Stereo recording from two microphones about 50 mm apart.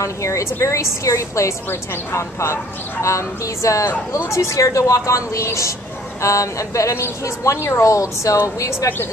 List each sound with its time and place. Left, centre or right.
0.0 s speech: left
2.1 s speech: left
4.3 s speech: left
8.5 s speech: left